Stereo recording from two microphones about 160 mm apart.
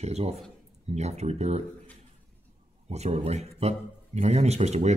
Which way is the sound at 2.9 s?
40° right (ahead or behind).